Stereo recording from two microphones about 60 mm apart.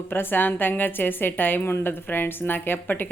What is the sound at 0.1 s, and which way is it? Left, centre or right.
A woman's voice, left.